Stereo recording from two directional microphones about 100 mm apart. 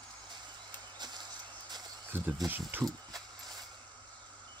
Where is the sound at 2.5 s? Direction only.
20° right (ahead or behind).